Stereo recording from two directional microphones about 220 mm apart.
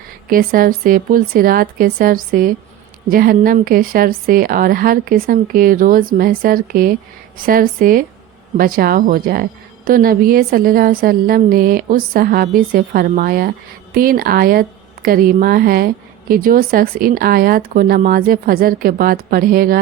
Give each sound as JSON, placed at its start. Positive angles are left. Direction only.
{"t": 0.3, "sound": "a woman's voice", "side_deg": -40}